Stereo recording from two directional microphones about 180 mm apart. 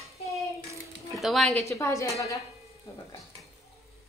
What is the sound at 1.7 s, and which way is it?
Speech, 15° left (ahead or behind).